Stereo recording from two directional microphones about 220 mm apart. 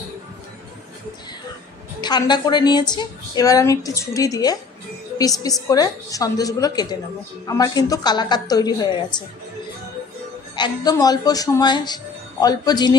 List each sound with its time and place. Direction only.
2.0 s a woman's voice: 20° left (ahead or behind)
10.5 s a woman's voice: 20° left (ahead or behind)